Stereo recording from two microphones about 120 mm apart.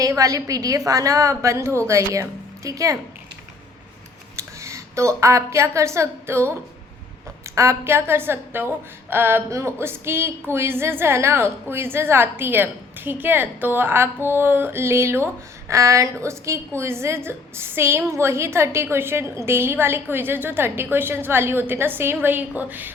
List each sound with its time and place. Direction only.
0.0 s a woman's voice: 30° right (ahead or behind)
4.4 s a woman's voice: 25° right (ahead or behind)
7.5 s a woman's voice: 25° right (ahead or behind)